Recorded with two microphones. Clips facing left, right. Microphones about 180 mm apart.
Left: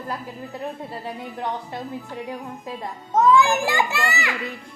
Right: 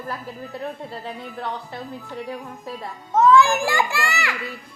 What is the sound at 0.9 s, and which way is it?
Speech, 15° left (ahead or behind).